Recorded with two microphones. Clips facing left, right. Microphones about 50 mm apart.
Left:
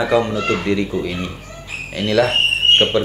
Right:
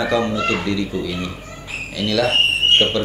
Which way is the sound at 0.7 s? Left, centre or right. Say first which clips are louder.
Left 3 dB; left.